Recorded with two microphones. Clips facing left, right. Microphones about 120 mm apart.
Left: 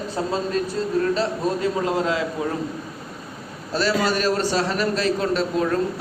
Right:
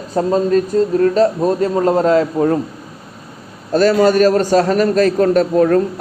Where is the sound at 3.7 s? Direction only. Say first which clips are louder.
Right 10 dB; 50° right (ahead or behind).